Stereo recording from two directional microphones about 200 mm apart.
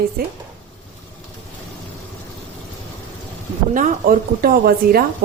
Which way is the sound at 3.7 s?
45° right (ahead or behind).